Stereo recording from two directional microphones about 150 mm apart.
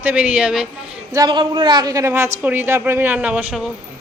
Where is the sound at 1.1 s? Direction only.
30° right (ahead or behind); by 3.6 s 5° right (ahead or behind).